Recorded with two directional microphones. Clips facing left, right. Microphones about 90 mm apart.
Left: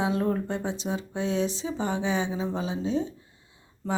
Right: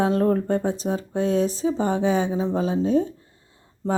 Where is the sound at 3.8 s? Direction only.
30° right (ahead or behind).